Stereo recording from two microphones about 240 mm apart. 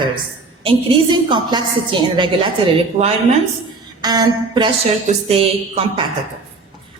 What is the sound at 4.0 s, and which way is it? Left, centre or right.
A woman's voice, centre.